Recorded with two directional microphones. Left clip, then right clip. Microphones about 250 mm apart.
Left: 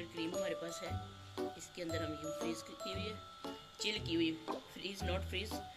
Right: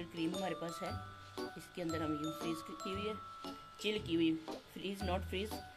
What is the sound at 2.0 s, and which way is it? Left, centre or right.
Speech, centre.